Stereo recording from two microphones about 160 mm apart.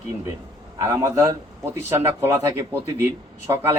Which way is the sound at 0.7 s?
20° right (ahead or behind).